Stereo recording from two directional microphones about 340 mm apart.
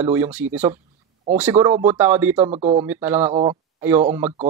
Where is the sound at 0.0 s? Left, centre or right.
Centre.